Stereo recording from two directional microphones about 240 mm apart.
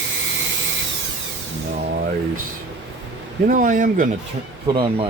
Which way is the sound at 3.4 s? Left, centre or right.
Right.